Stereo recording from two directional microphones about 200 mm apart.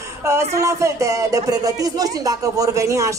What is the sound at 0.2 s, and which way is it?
Speech, 15° right (ahead or behind).